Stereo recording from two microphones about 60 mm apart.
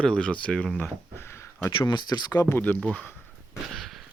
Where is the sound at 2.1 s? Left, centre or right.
Left.